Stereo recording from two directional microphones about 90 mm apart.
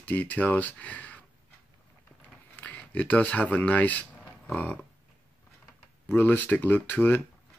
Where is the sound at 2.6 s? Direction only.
15° left (ahead or behind).